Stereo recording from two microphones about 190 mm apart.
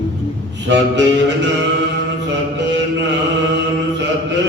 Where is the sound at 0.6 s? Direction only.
65° right (ahead or behind).